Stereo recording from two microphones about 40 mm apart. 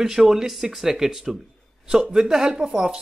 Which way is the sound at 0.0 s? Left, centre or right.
Centre.